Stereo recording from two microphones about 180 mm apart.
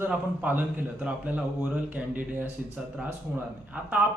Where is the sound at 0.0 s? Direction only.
10° right (ahead or behind).